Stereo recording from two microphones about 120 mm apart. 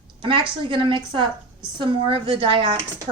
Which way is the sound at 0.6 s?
45° right (ahead or behind).